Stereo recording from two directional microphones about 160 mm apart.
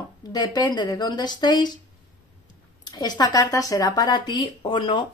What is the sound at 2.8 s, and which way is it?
Speech, 25° left (ahead or behind).